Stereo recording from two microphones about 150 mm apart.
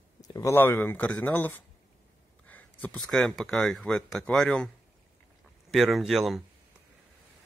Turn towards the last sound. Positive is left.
turn(degrees=0)  # may be behind; listen again after turning